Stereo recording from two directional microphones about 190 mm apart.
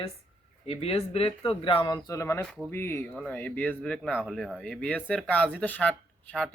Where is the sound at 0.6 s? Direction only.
30° left (ahead or behind); by 6.5 s 5° left (ahead or behind).